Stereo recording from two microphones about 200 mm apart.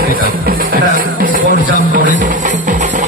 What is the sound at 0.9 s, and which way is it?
Music, 45° right (ahead or behind).